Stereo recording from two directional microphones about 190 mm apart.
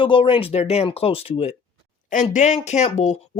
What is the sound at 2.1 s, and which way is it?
Speech, 40° left (ahead or behind).